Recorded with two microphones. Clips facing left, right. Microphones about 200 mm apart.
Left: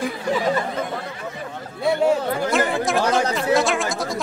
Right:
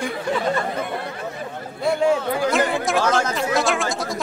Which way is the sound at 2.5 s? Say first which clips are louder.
Even; centre (ahead or behind).